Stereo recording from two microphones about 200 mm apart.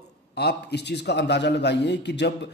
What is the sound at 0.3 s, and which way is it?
A man's voice, 55° left (ahead or behind).